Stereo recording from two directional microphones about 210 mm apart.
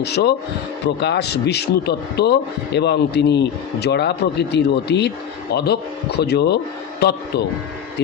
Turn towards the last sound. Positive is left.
turn(degrees=50)  # may be behind; listen again after turning